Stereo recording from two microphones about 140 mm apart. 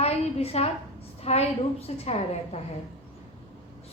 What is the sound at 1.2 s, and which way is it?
Speech, 50° left (ahead or behind).